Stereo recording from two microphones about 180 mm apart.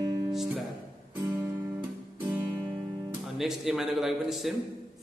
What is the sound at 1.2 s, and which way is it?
Guitar, 15° right (ahead or behind).